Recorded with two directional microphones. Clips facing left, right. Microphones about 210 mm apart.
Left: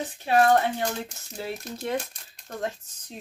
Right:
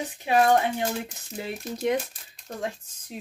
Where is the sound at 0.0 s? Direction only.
15° right (ahead or behind).